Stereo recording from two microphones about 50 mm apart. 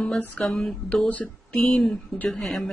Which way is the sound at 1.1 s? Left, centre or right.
Left.